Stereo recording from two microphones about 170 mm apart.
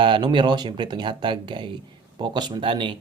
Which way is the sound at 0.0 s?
25° right (ahead or behind).